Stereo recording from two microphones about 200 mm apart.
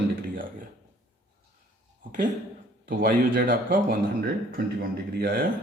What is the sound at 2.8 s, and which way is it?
A man's voice, 45° right (ahead or behind).